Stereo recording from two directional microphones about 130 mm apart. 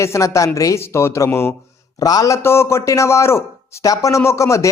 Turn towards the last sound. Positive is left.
turn(degrees=20)  # may be behind; listen again after turning